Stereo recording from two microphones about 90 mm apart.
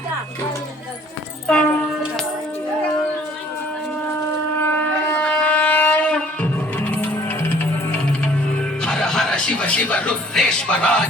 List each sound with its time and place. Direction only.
1.5 s a sound: 10° left (ahead or behind)
4.6 s shofar: 20° left (ahead or behind)
8.8 s speech: 5° left (ahead or behind)